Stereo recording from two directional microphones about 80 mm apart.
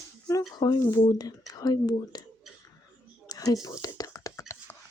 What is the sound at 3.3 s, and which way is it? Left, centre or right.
Speech, left.